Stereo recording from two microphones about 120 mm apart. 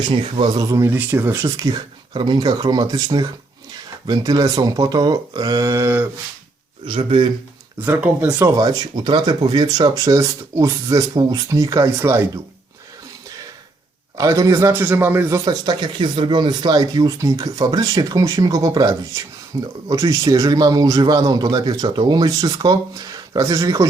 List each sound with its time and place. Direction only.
0.1 s a man's voice: 40° right (ahead or behind)
2.1 s a man's voice: 40° right (ahead or behind); by 6.1 s 20° right (ahead or behind)
6.8 s a man's voice: 45° right (ahead or behind)
7.8 s speech: 15° right (ahead or behind)
8.4 s a man's voice: 30° right (ahead or behind)
11.1 s a man's voice: 40° right (ahead or behind)
11.4 s a man's voice: 25° right (ahead or behind)
14.2 s a man's voice: 25° right (ahead or behind)
15.4 s a man's voice: 40° right (ahead or behind)